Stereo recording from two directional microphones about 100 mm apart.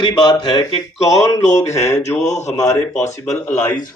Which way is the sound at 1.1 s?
35° left (ahead or behind).